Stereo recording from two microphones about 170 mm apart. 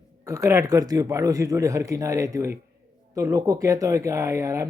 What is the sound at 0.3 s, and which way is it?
Speech, 15° right (ahead or behind).